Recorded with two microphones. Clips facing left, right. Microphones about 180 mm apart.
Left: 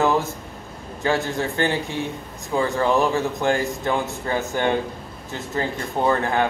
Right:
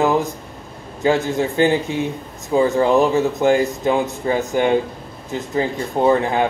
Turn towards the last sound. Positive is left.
turn(degrees=-15)  # may be behind; listen again after turning